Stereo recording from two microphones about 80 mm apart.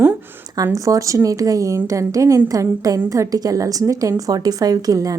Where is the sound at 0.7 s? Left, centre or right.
Right.